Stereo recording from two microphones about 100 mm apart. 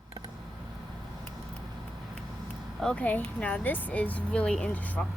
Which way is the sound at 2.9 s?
15° left (ahead or behind).